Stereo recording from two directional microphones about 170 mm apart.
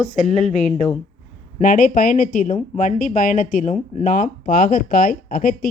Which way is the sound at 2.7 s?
45° left (ahead or behind).